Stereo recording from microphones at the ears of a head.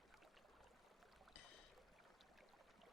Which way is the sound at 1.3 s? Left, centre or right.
Left.